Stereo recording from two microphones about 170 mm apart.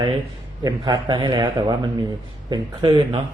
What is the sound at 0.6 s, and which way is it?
A man's voice, 25° right (ahead or behind).